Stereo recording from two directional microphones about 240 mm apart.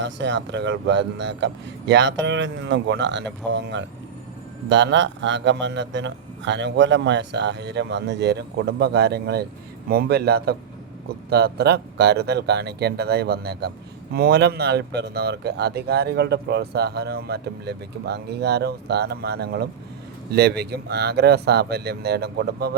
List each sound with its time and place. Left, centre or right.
0.0 s speech: right